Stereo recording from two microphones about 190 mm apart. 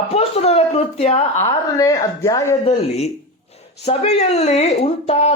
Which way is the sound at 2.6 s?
30° left (ahead or behind).